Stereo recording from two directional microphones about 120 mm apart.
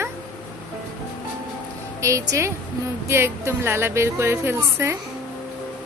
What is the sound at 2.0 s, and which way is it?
A woman's voice, 25° right (ahead or behind).